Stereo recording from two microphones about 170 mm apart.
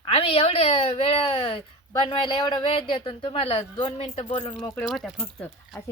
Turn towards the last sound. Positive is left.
turn(degrees=5)  # may be behind; listen again after turning